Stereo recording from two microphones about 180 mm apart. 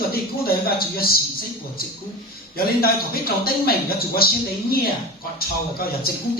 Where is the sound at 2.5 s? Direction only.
55° left (ahead or behind).